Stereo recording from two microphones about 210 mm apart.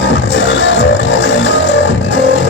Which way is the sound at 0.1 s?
60° left (ahead or behind).